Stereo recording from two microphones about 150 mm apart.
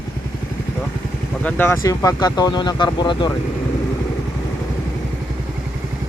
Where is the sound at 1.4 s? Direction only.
10° left (ahead or behind).